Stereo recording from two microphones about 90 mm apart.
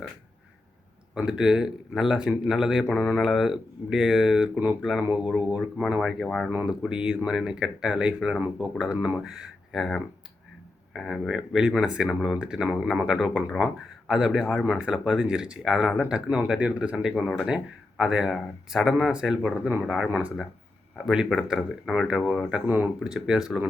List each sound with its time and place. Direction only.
1.1 s speech: 10° right (ahead or behind)
4.8 s speech: 5° right (ahead or behind)
6.7 s speech: 10° right (ahead or behind)
22.6 s speech: 20° right (ahead or behind)
23.0 s speech: 5° right (ahead or behind)